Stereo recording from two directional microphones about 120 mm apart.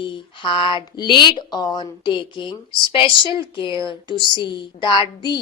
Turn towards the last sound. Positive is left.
turn(degrees=40)  # may be behind; listen again after turning